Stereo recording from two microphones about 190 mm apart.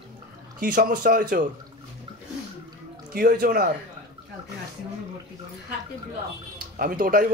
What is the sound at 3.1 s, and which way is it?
Speech, 55° right (ahead or behind).